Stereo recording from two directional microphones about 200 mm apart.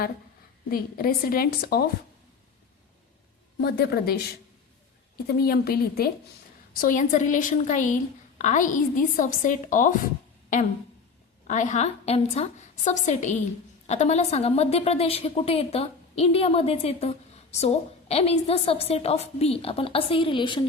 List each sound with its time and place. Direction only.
0.7 s a woman's voice: 45° left (ahead or behind)
3.6 s a woman's voice: 50° left (ahead or behind)
5.4 s a woman's voice: 50° left (ahead or behind); by 20.7 s 25° left (ahead or behind)